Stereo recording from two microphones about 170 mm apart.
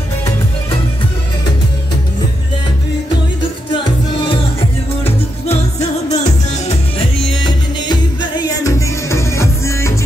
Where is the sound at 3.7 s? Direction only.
30° left (ahead or behind).